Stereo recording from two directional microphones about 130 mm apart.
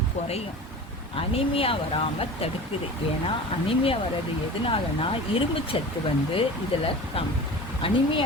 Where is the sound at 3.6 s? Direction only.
45° left (ahead or behind).